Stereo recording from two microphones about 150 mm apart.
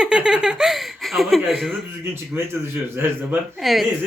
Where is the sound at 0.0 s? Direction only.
5° right (ahead or behind).